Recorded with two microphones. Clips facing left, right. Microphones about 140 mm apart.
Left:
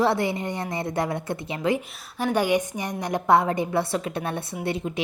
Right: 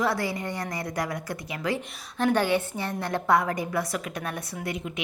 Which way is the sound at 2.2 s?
10° left (ahead or behind).